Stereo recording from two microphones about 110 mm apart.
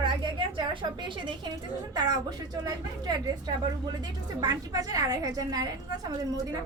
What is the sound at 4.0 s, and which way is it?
A woman's voice, 40° right (ahead or behind).